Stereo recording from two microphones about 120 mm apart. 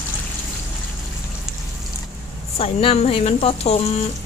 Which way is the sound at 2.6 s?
55° left (ahead or behind).